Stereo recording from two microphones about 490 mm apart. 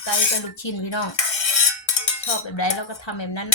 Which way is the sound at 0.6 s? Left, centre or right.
Left.